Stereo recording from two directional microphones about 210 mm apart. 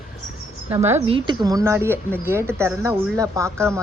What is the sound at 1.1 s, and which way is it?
A woman's voice, 20° right (ahead or behind).